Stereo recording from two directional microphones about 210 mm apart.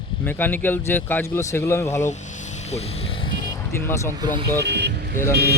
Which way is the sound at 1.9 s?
35° left (ahead or behind).